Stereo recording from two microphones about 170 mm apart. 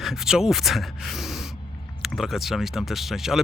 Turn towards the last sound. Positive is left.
turn(degrees=0)  # may be behind; listen again after turning